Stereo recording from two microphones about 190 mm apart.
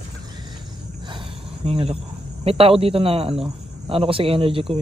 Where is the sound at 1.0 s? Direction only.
30° right (ahead or behind).